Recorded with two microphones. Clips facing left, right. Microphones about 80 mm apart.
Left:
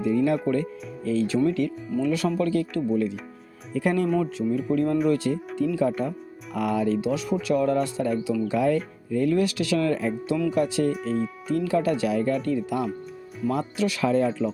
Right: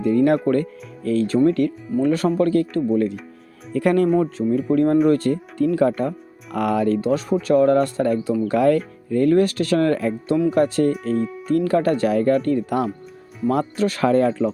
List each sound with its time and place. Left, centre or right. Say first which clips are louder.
0.0 s speech: right 5 dB; right
3.7 s speech: right 6 dB; right
4.2 s speech: right 5 dB; right
8.5 s speech: right 7 dB; right